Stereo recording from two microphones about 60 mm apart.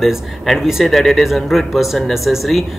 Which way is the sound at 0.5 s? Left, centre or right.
Centre.